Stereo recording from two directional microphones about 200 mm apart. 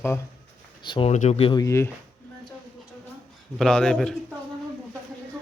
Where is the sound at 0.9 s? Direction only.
30° left (ahead or behind).